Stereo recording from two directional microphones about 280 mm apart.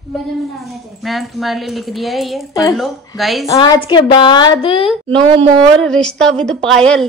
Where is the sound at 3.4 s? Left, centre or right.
Centre.